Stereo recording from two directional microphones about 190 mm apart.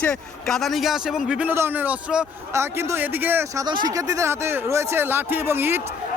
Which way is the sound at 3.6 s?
25° right (ahead or behind).